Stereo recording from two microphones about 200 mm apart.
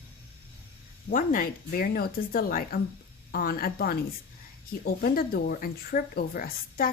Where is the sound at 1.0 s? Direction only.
45° left (ahead or behind).